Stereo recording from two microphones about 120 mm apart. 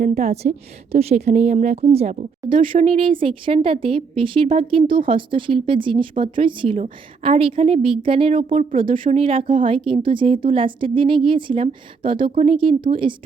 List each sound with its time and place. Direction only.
0.0 s a woman's voice: 70° right (ahead or behind); by 6.7 s 45° right (ahead or behind)
6.7 s a woman's voice: 60° right (ahead or behind); by 13.1 s 45° right (ahead or behind)